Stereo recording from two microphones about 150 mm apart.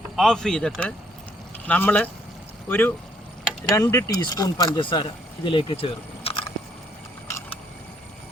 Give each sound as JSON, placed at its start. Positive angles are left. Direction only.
{"t": 0.2, "sound": "a man's voice", "side_deg": 5}